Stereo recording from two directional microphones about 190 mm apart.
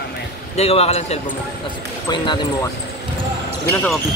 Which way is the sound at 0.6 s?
30° left (ahead or behind).